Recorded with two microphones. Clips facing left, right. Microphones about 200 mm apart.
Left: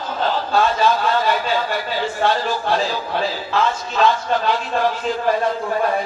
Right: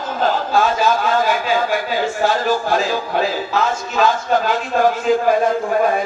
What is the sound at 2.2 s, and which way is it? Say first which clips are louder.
A man's voice: right 1 dB; 45° right (ahead or behind).